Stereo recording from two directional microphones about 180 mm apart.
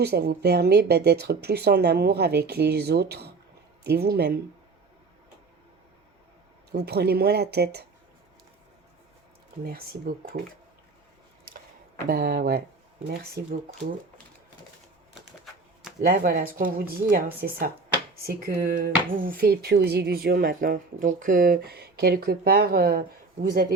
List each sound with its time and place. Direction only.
0.0 s speech: 65° right (ahead or behind)
6.7 s speech: 65° right (ahead or behind)
12.0 s speech: 55° right (ahead or behind)
16.0 s speech: 55° right (ahead or behind)